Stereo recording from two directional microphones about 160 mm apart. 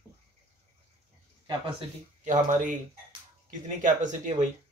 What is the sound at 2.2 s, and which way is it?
Speech, 50° right (ahead or behind).